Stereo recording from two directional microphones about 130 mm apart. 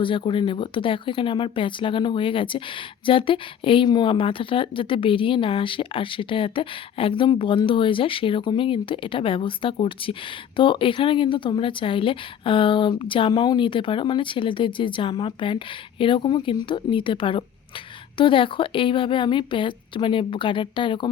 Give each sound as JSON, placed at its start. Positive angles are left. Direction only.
{"t": 0.0, "sound": "speech", "side_deg": 40}